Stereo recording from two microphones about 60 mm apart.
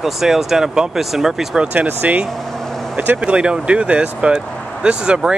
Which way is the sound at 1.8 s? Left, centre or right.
Right.